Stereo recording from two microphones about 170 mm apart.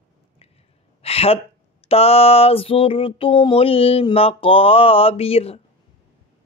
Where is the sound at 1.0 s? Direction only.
35° left (ahead or behind).